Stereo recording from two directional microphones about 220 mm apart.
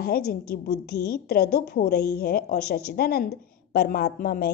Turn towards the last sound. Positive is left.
turn(degrees=45)  # may be behind; listen again after turning